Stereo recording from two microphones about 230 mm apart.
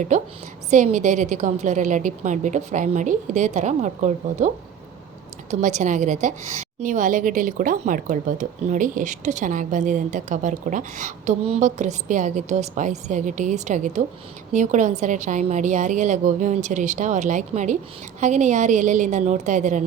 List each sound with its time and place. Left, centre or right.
0.1 s speech: right